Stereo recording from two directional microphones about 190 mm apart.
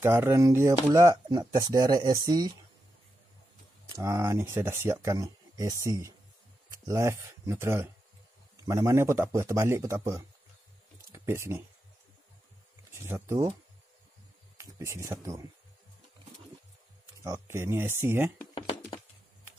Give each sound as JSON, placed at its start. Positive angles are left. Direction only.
{"t": 0.0, "sound": "speech", "side_deg": -10}
{"t": 3.9, "sound": "speech", "side_deg": -15}
{"t": 12.9, "sound": "speech", "side_deg": -15}
{"t": 14.6, "sound": "speech", "side_deg": -15}
{"t": 17.2, "sound": "speech", "side_deg": -15}
{"t": 18.5, "sound": "a sound", "side_deg": 25}